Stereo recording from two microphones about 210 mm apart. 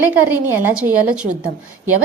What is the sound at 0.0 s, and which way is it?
A woman's voice, 10° right (ahead or behind).